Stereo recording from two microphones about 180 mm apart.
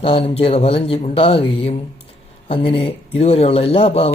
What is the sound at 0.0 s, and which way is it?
Speech, 30° left (ahead or behind).